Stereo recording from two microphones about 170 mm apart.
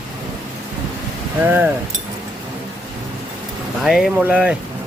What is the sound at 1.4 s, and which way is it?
Speech, 10° right (ahead or behind).